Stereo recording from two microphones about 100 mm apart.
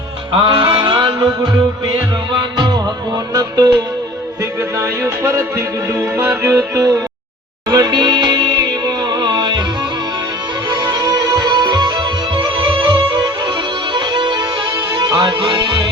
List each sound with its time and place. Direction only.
0.4 s music: 55° right (ahead or behind)
4.8 s music: 30° right (ahead or behind)
7.7 s music: 45° right (ahead or behind)
10.7 s music: 45° right (ahead or behind)
13.9 s music: 50° right (ahead or behind)